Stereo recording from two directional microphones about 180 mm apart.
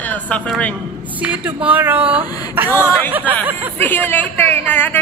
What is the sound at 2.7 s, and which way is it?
Speech, 10° left (ahead or behind).